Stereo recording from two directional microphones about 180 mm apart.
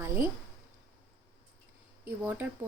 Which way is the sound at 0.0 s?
15° right (ahead or behind).